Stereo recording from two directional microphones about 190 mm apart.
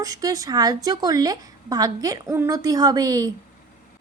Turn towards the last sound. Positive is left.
turn(degrees=-20)  # may be behind; listen again after turning